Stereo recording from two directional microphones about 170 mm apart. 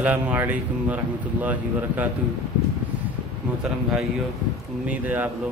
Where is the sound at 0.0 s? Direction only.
10° right (ahead or behind).